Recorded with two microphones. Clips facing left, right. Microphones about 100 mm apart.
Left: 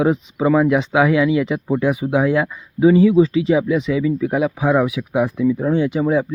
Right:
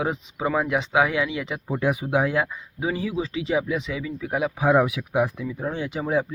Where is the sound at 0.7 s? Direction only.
25° right (ahead or behind).